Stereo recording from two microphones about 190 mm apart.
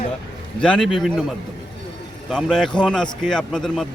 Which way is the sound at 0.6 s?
5° left (ahead or behind).